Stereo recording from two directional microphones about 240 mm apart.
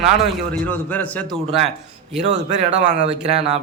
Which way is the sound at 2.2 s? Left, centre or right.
Right.